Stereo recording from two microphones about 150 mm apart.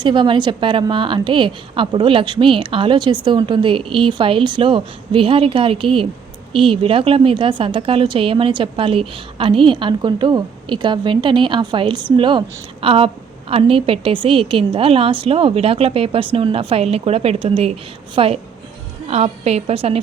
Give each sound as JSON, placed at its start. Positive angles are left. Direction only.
{"t": 0.0, "sound": "a woman's voice", "side_deg": -30}